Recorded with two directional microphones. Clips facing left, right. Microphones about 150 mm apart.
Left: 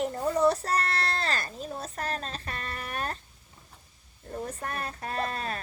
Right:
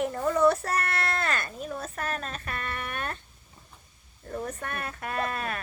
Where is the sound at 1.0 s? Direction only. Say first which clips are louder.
Right 1 dB; 55° right (ahead or behind).